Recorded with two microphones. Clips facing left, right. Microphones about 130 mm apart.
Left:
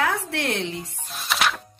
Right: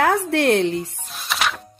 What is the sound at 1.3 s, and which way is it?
Music, centre (ahead or behind).